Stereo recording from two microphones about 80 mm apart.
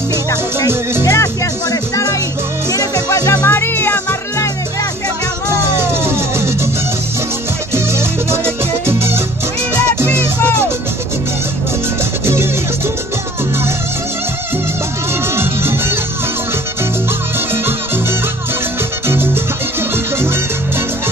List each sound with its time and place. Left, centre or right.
1.0 s music: left
3.4 s music: left
5.5 s music: right
7.7 s music: right
15.3 s music: right
19.0 s music: right